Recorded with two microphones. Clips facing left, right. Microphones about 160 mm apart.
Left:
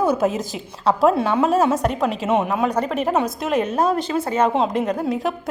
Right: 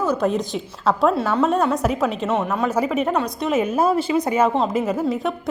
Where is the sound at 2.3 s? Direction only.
15° left (ahead or behind).